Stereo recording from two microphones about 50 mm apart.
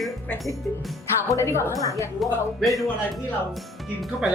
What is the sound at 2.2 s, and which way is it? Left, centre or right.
Speech, centre.